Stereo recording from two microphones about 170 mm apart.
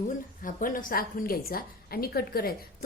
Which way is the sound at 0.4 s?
55° left (ahead or behind).